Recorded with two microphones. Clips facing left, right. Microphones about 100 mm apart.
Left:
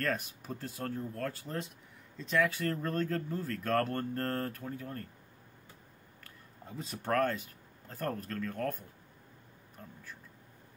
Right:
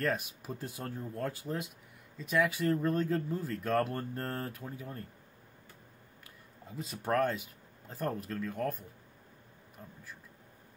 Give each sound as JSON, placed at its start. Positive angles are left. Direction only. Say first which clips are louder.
{"t": 0.0, "sound": "speech", "louder": "right 1 dB", "side_deg": -15}
{"t": 6.8, "sound": "speech", "louder": "right 1 dB", "side_deg": 0}
{"t": 7.1, "sound": "speech", "louder": "even", "side_deg": -15}